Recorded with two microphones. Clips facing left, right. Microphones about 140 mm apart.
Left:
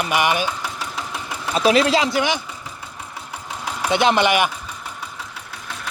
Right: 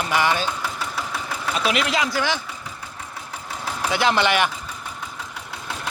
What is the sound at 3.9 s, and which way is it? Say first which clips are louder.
Speech: left 3 dB; 20° left (ahead or behind).